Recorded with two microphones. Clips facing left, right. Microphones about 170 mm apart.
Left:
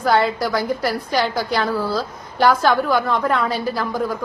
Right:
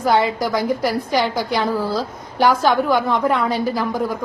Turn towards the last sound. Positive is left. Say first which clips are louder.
# right 1 dB
turn(degrees=-15)  # may be behind; listen again after turning